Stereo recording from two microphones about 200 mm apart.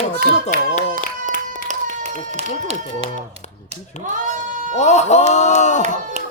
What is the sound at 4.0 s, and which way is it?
Bleat, 40° right (ahead or behind).